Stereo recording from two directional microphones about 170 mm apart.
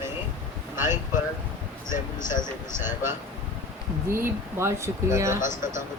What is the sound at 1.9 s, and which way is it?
Speech, 50° left (ahead or behind).